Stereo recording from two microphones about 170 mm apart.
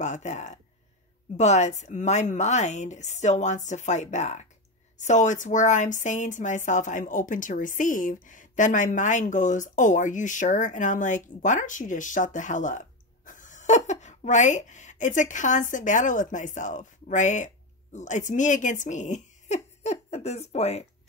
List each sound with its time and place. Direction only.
0.0 s speech: 45° left (ahead or behind)